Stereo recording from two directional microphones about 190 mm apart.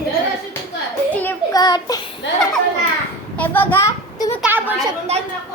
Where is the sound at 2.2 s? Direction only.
70° left (ahead or behind).